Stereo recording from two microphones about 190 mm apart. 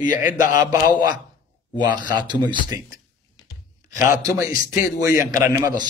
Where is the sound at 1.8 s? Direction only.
25° right (ahead or behind).